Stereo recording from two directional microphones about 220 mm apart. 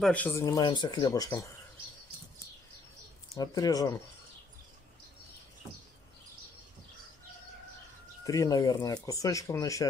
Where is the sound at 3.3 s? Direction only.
15° left (ahead or behind).